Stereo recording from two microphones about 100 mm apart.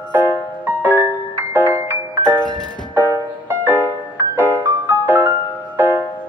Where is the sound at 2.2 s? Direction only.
45° left (ahead or behind).